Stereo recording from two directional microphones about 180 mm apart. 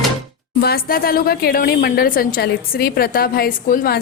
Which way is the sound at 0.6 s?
55° left (ahead or behind).